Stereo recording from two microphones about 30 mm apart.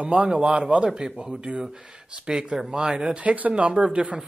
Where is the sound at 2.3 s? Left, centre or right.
Right.